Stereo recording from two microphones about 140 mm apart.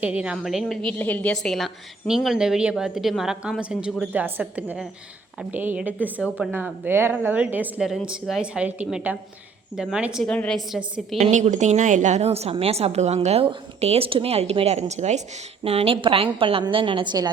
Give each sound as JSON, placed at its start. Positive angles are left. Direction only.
{"t": 0.0, "sound": "a woman's voice", "side_deg": -10}
{"t": 0.9, "sound": "a woman's voice", "side_deg": 10}
{"t": 10.2, "sound": "a woman's voice", "side_deg": 5}
{"t": 10.8, "sound": "a woman's voice", "side_deg": -5}
{"t": 11.2, "sound": "a woman's voice", "side_deg": -55}